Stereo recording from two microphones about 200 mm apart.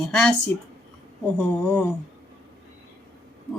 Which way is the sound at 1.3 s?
10° left (ahead or behind).